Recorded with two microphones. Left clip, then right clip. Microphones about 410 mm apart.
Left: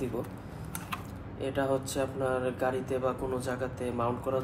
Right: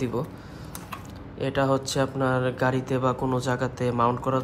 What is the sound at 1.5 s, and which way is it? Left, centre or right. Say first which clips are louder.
Speech: right 6 dB; centre.